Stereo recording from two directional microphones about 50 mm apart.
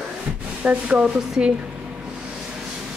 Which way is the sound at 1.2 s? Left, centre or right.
Centre.